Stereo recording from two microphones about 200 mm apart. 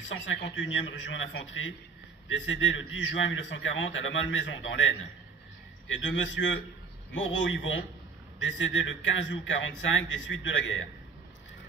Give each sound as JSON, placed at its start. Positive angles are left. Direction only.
{"t": 0.1, "sound": "a man's voice", "side_deg": 70}